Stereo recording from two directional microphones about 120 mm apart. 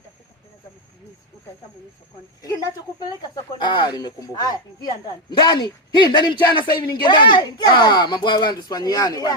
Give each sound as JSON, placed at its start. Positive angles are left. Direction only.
{"t": 2.4, "sound": "speech", "side_deg": 30}